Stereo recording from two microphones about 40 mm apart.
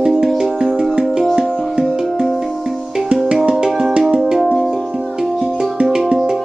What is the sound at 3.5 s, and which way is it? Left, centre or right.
Music, centre.